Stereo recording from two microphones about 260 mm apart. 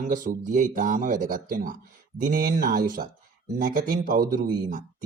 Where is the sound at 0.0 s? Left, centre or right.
Right.